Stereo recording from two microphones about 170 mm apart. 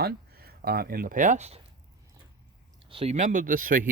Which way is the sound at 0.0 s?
65° right (ahead or behind).